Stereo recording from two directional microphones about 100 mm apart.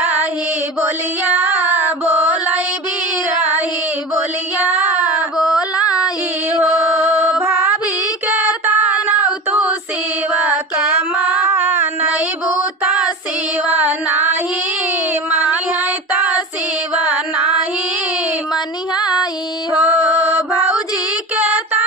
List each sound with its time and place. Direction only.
1.2 s child singing: 15° right (ahead or behind)
4.6 s child singing: 15° right (ahead or behind)
5.6 s female singing: 40° left (ahead or behind)
6.6 s music: 20° right (ahead or behind)
8.3 s female singing: 15° right (ahead or behind)
13.7 s music: 15° right (ahead or behind)
18.5 s a sound: 45° left (ahead or behind)
19.8 s mantra: 15° right (ahead or behind)
21.4 s a sound: 15° right (ahead or behind)